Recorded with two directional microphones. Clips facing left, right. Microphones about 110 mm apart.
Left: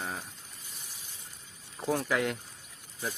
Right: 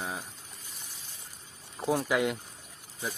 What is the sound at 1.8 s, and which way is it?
Speech, 10° right (ahead or behind).